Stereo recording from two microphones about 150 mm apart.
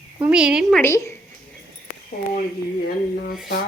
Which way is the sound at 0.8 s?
20° left (ahead or behind).